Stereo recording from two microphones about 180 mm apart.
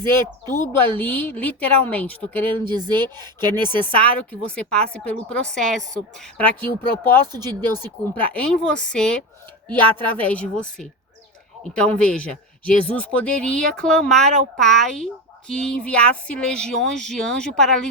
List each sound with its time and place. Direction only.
0.6 s speech: 25° right (ahead or behind)
0.9 s a woman's voice: 10° left (ahead or behind)
2.6 s speech: 25° right (ahead or behind)
3.8 s a woman's voice: 10° left (ahead or behind)